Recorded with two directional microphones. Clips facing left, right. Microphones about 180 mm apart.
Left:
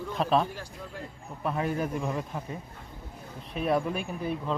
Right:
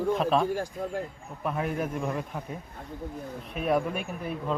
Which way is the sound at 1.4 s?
Centre (ahead or behind).